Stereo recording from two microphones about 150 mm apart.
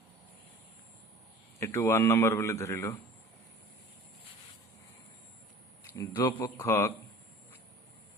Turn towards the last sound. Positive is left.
turn(degrees=15)  # may be behind; listen again after turning